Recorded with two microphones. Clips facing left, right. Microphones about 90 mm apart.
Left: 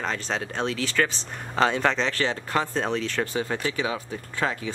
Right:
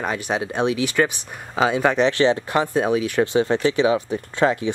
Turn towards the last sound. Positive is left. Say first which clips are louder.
# right 8 dB
turn(degrees=-15)  # may be behind; listen again after turning